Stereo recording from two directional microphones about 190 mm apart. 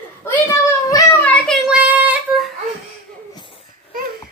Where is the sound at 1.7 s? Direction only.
10° right (ahead or behind).